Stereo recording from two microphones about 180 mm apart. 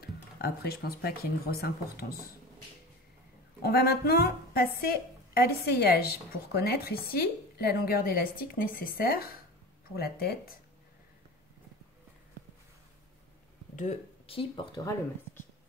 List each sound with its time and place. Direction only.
0.0 s speech: 60° left (ahead or behind)
3.6 s a woman's voice: 60° left (ahead or behind)
13.7 s speech: 35° left (ahead or behind)